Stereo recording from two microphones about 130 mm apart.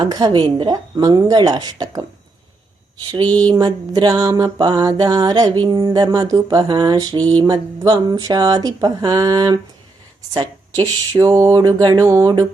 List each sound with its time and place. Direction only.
0.0 s mantra: 30° right (ahead or behind)
3.5 s mantra: 30° right (ahead or behind)
10.3 s speech: 30° right (ahead or behind)